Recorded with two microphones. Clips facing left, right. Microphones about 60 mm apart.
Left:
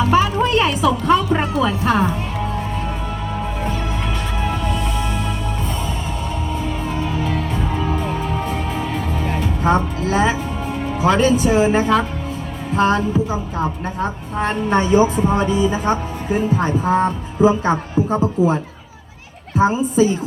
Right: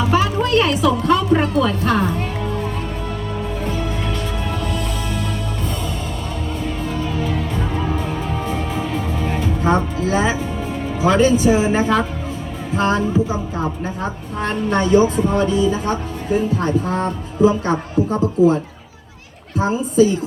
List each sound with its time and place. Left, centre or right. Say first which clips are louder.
0.1 s a sound: right 1 dB; centre
0.9 s music: even; centre
6.9 s music: left 1 dB; centre
12.7 s a woman's voice: left 1 dB; centre
14.3 s speech: left 2 dB; centre
19.5 s speech: even; left